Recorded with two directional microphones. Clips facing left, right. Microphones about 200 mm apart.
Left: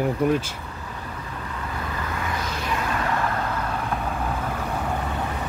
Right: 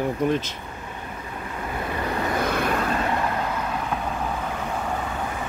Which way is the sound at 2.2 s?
55° right (ahead or behind).